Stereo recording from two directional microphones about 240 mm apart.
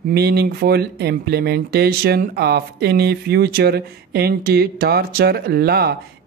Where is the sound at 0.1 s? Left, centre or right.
Right.